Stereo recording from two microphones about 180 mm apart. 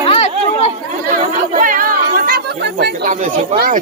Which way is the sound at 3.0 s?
45° right (ahead or behind).